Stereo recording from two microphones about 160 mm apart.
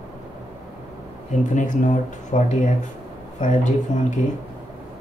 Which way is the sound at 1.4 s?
50° left (ahead or behind).